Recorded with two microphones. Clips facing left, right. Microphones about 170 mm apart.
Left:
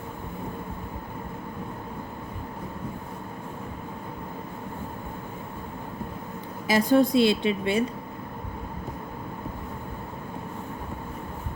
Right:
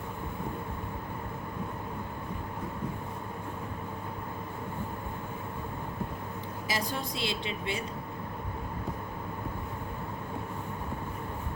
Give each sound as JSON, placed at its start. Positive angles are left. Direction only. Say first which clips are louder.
{"t": 6.7, "sound": "speech", "louder": "left 15 dB", "side_deg": 55}